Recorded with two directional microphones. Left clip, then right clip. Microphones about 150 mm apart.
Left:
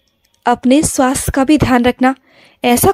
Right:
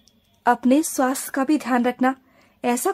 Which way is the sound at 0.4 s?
35° left (ahead or behind).